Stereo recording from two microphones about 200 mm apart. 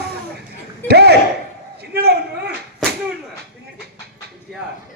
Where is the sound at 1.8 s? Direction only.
55° right (ahead or behind).